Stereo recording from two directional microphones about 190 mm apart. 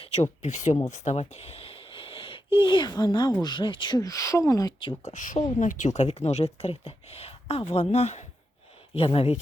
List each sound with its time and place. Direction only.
0.0 s speech: 35° left (ahead or behind)
5.1 s speech: 40° left (ahead or behind)